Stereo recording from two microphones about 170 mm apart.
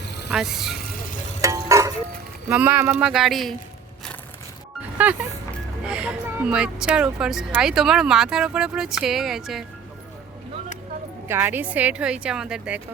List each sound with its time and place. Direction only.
0.0 s vehicle: 80° left
0.3 s speech: centre (ahead or behind)
1.4 s tick-tock: 20° right (ahead or behind)
2.5 s a woman's voice: 10° right (ahead or behind)
5.0 s a woman's voice: 10° right (ahead or behind)
11.3 s a woman's voice: 15° right (ahead or behind)